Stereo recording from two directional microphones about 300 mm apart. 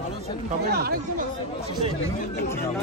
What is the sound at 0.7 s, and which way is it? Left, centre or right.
Speech, right.